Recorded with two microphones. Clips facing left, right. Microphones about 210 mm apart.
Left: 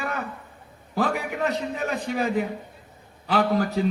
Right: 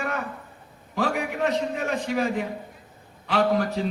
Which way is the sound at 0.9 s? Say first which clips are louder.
Left 1 dB; 35° left (ahead or behind).